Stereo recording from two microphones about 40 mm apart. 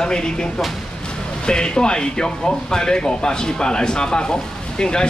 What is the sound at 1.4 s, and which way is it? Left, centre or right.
Speech, left.